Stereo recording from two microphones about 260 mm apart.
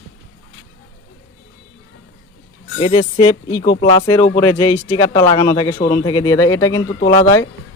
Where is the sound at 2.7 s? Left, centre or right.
Centre.